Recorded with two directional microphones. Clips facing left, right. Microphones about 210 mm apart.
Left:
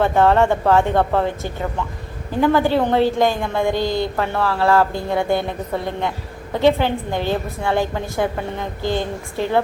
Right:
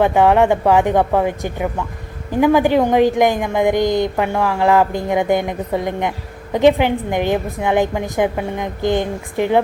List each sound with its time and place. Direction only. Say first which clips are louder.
0.0 s a woman's voice: right 2 dB; 15° right (ahead or behind)